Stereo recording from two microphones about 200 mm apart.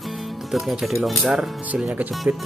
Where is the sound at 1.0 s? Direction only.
Centre (ahead or behind).